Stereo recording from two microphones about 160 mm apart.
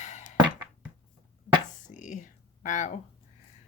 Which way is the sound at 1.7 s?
50° left (ahead or behind).